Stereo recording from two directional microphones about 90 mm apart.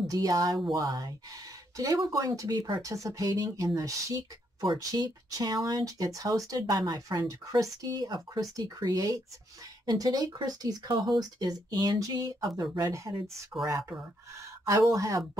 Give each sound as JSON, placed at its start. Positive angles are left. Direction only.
{"t": 0.1, "sound": "speech", "side_deg": -40}
{"t": 2.1, "sound": "speech", "side_deg": -35}